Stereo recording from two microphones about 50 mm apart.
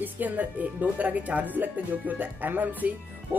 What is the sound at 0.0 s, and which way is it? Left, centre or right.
Speech, right.